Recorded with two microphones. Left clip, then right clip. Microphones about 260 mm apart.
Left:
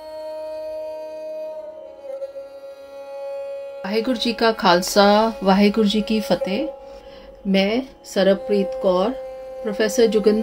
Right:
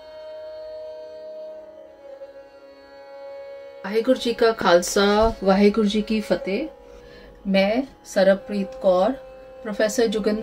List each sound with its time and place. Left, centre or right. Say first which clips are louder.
3.1 s music: left 8 dB; left
3.8 s speech: right 2 dB; left
7.5 s speech: even; left